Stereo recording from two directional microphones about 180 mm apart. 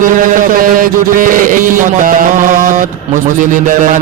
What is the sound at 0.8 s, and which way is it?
Speech, 50° right (ahead or behind).